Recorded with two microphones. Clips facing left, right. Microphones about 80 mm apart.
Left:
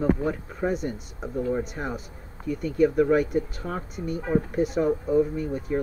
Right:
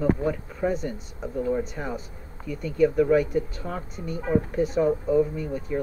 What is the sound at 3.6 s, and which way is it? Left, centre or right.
Speech, centre.